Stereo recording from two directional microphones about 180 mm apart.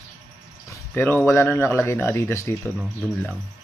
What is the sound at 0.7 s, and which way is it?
Speech, 15° left (ahead or behind).